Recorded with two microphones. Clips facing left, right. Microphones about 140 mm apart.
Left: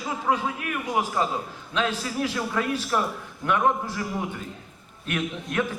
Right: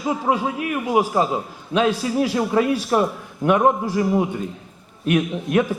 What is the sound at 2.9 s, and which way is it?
A man's voice, 25° right (ahead or behind).